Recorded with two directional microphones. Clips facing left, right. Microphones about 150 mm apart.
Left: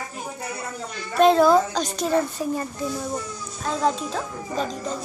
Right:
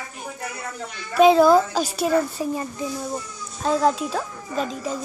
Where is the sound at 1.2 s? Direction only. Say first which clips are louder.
Right 2 dB; centre (ahead or behind).